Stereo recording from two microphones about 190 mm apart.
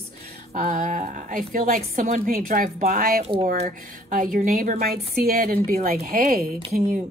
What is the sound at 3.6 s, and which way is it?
A woman's voice, 45° right (ahead or behind).